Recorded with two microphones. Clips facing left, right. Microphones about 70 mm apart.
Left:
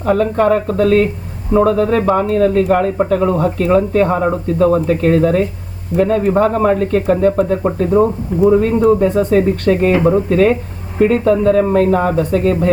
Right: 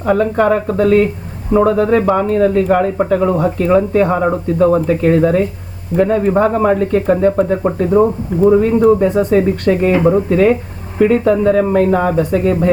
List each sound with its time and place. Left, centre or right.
0.0 s speech: centre
9.0 s speech: right
9.3 s speech: centre